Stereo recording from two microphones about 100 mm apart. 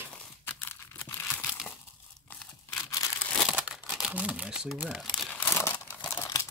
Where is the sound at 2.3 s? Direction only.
15° left (ahead or behind).